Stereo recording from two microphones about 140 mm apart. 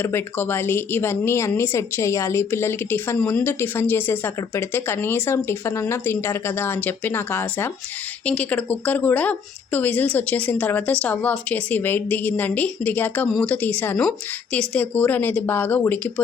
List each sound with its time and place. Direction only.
0.0 s speech: 15° left (ahead or behind)